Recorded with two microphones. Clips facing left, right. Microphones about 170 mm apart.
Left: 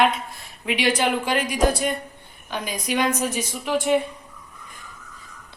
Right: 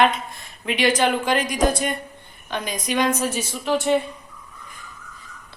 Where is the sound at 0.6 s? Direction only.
10° left (ahead or behind).